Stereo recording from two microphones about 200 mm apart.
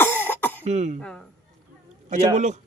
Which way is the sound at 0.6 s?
35° right (ahead or behind).